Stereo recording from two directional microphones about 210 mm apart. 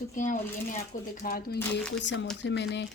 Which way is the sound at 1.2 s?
45° left (ahead or behind).